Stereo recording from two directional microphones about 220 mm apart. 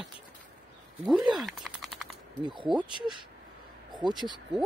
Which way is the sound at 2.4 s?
20° right (ahead or behind).